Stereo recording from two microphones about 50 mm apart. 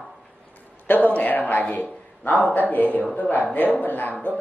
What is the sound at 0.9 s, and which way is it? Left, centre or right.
A man's voice, left.